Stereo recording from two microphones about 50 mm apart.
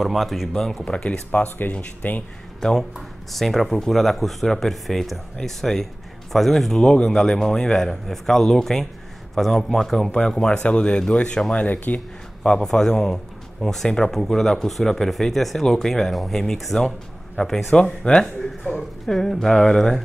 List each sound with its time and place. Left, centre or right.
0.0 s speech: centre
0.8 s speech: centre
2.6 s speech: centre
6.8 s speech: centre
11.5 s speech: left
12.6 s speech: centre
17.4 s speech: left
18.2 s a sound: centre
19.0 s speech: centre